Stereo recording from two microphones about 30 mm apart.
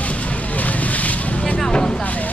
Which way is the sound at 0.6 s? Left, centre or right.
Left.